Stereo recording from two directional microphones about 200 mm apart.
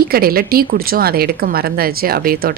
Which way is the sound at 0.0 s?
50° right (ahead or behind).